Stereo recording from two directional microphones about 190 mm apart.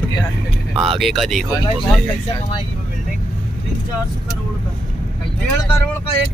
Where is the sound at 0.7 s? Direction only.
30° right (ahead or behind).